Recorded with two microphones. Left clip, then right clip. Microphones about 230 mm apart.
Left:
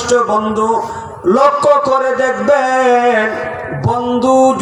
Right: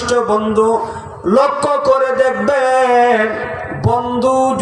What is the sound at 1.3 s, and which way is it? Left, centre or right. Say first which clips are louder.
A man's voice: left 3 dB; right.